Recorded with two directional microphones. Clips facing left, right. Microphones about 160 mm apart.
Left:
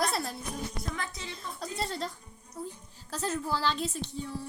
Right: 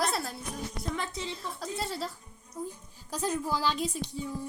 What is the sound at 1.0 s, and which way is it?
Speech, 25° right (ahead or behind).